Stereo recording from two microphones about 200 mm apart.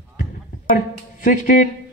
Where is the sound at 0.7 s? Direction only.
40° left (ahead or behind).